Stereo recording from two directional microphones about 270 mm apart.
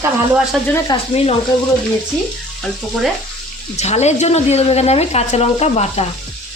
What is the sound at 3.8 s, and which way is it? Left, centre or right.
A woman's voice, left.